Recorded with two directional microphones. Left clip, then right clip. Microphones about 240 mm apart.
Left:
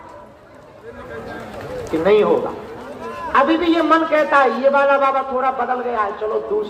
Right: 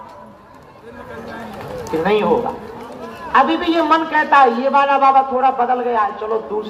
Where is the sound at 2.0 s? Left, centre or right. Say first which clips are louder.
Left 3 dB; right.